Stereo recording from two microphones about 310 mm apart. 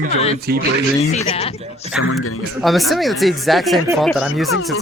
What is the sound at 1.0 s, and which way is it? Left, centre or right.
Music, centre.